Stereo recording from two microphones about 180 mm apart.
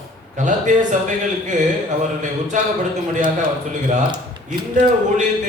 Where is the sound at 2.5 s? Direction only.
45° right (ahead or behind).